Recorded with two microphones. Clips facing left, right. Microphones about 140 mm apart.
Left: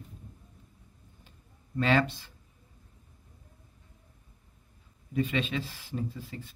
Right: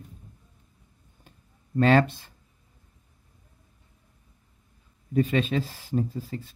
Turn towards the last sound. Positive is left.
turn(degrees=-40)  # may be behind; listen again after turning